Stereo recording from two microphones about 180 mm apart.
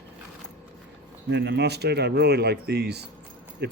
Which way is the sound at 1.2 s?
70° right (ahead or behind).